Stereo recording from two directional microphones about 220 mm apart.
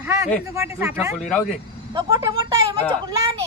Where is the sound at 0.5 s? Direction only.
10° right (ahead or behind).